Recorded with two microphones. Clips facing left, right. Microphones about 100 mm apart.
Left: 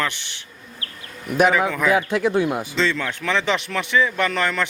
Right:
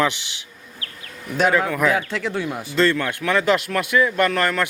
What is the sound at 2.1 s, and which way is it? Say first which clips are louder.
Speech: left 5 dB; 15° left (ahead or behind).